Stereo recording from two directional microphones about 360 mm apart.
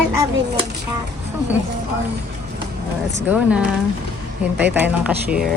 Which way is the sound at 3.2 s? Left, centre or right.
Centre.